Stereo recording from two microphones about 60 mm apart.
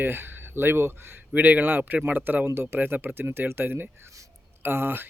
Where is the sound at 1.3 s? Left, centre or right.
Right.